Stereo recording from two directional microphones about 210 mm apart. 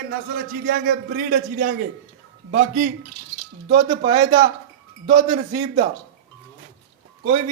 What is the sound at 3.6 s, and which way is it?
Speech, 30° right (ahead or behind).